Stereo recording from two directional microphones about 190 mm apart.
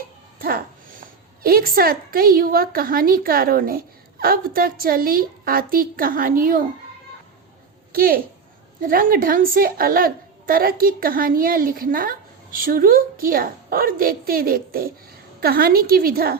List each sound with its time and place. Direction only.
0.3 s a woman's voice: 50° right (ahead or behind)
7.9 s a woman's voice: 50° right (ahead or behind)